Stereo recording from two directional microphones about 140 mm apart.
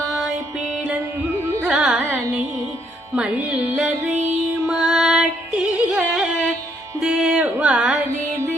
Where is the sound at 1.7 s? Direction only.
5° right (ahead or behind).